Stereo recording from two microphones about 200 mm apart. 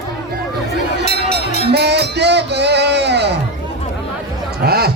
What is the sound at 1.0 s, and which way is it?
Music, 55° right (ahead or behind).